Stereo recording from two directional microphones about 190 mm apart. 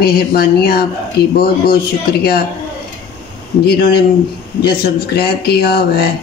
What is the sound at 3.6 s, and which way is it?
Speech, 55° left (ahead or behind).